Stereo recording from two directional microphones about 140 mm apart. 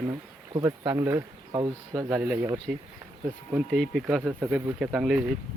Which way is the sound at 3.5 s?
Centre (ahead or behind).